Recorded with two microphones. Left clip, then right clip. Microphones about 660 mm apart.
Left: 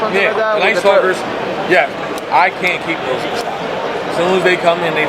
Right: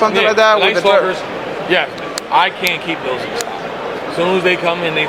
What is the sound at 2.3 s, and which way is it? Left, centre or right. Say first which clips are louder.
Speech: left 1 dB; right.